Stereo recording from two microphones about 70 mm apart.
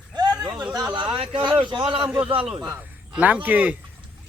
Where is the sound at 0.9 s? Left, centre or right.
Right.